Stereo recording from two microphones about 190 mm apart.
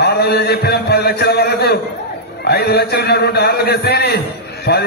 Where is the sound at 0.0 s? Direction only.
60° left (ahead or behind).